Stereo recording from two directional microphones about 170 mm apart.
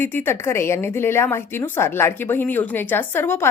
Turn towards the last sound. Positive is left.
turn(degrees=15)  # may be behind; listen again after turning